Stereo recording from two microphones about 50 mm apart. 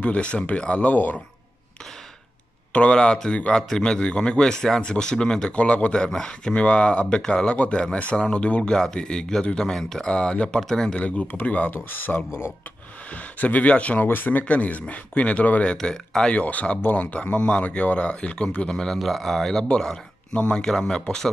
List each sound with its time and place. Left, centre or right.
0.0 s speech: left
0.7 s speech: left
2.7 s speech: left
7.5 s speech: left; by 11.0 s centre
11.0 s speech: left
11.7 s speech: left
14.0 s speech: left
15.8 s speech: centre
16.3 s speech: left
18.7 s speech: centre